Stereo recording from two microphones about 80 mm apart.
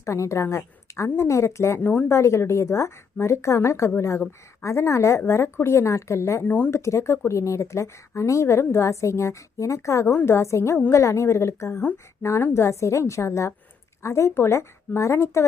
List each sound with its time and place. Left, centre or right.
0.0 s a woman's voice: left
1.8 s speech: left
2.0 s a woman's voice: left